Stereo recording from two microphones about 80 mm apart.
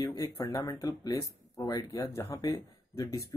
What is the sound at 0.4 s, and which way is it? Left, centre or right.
Speech, left.